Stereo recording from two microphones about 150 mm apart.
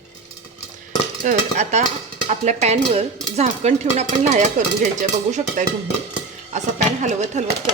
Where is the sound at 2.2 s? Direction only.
50° right (ahead or behind).